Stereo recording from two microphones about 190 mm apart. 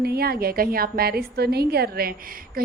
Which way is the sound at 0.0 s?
55° right (ahead or behind).